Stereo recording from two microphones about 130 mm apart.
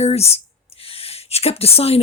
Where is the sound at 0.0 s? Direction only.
50° left (ahead or behind).